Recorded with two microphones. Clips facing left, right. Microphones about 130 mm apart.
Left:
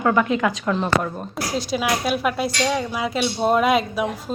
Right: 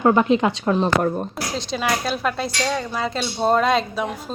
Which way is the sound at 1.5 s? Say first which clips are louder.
Left 1 dB; 5° left (ahead or behind).